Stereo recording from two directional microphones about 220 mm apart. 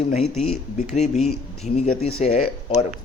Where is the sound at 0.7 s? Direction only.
30° left (ahead or behind).